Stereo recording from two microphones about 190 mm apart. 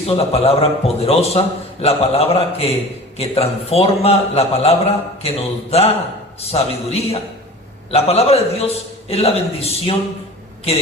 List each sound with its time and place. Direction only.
0.1 s a man's voice: 30° left (ahead or behind)